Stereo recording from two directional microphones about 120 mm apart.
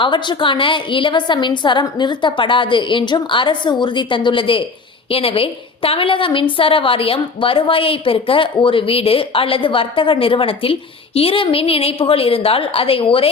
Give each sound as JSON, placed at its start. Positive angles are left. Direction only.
{"t": 0.0, "sound": "a woman's voice", "side_deg": 40}